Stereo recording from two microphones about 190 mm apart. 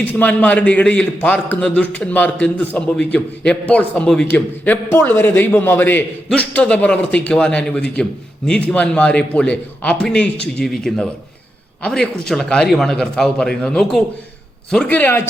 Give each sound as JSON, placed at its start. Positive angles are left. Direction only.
{"t": 0.0, "sound": "a man's voice", "side_deg": 10}